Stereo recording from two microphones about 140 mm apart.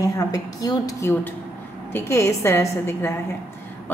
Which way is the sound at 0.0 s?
25° left (ahead or behind).